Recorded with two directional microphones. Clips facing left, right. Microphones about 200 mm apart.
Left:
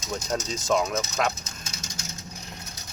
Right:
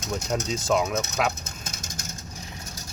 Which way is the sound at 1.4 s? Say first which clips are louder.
Right 2 dB; 55° right (ahead or behind).